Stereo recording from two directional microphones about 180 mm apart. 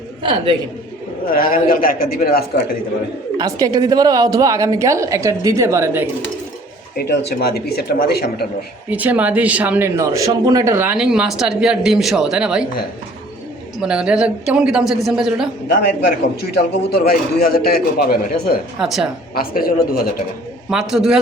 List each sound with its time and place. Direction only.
0.2 s a woman's voice: 30° right (ahead or behind)
1.3 s a man's voice: 55° left (ahead or behind)
3.3 s a woman's voice: 20° right (ahead or behind)
6.9 s speech: 65° left (ahead or behind)
8.9 s speech: 10° right (ahead or behind)
13.7 s speech: 5° right (ahead or behind)
16.4 s speech: 65° left (ahead or behind)
18.8 s speech: centre (ahead or behind)
19.3 s speech: 55° left (ahead or behind)
20.7 s speech: centre (ahead or behind)